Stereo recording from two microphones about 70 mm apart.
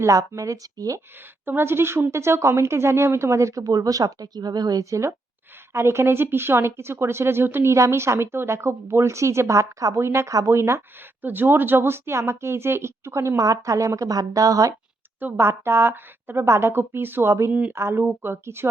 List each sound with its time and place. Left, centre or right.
0.0 s a woman's voice: right
1.5 s a woman's voice: right
11.2 s speech: right
15.2 s speech: right